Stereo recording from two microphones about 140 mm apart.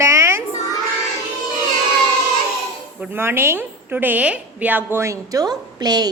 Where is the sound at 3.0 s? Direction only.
15° right (ahead or behind).